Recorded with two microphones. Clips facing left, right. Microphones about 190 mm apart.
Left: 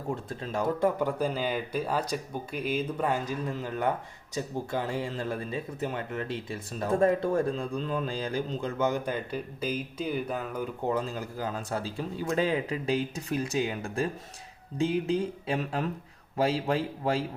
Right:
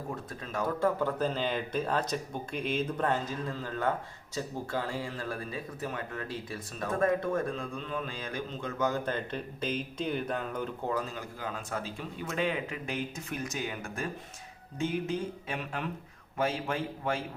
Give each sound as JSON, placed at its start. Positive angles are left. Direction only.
{"t": 0.3, "sound": "speech", "side_deg": 25}
{"t": 0.9, "sound": "speech", "side_deg": 15}
{"t": 8.9, "sound": "speech", "side_deg": 10}
{"t": 11.1, "sound": "speech", "side_deg": 35}